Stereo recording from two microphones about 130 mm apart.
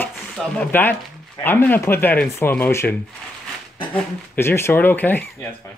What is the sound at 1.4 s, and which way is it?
Speech, 15° left (ahead or behind).